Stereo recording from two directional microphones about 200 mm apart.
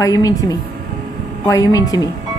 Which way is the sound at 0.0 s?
20° left (ahead or behind).